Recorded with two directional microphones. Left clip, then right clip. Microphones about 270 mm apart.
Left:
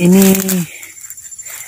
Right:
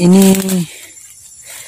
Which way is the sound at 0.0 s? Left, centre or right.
Centre.